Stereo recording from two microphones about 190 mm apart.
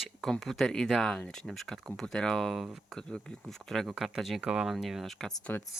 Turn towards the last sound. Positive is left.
turn(degrees=5)  # may be behind; listen again after turning